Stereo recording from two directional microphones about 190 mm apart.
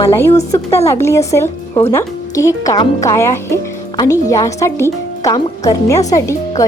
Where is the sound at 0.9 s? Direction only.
15° left (ahead or behind).